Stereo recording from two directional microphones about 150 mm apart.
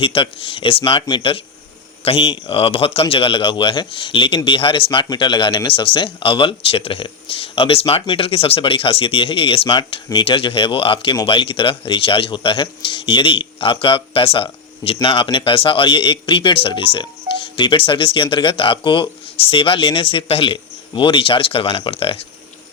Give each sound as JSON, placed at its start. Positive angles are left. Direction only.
{"t": 0.0, "sound": "speech", "side_deg": 35}